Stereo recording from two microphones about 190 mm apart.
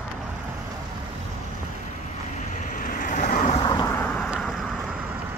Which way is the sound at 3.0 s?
45° left (ahead or behind).